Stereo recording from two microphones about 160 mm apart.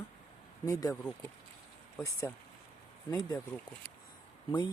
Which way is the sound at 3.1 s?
25° left (ahead or behind).